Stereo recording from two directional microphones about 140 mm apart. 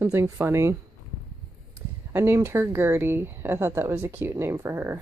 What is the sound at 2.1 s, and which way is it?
Speech, 20° right (ahead or behind).